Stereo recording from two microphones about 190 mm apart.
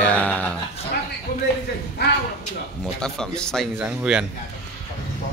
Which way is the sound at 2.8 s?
5° left (ahead or behind).